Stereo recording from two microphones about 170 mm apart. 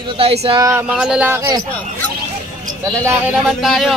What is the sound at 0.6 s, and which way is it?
Speech, 20° right (ahead or behind).